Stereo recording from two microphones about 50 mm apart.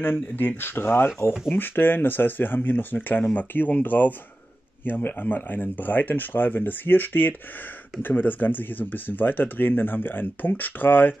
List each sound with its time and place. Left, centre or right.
0.0 s speech: left